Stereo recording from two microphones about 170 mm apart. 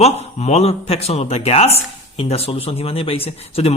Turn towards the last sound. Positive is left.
turn(degrees=35)  # may be behind; listen again after turning